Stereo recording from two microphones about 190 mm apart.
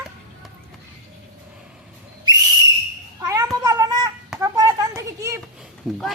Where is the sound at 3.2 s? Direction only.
20° right (ahead or behind).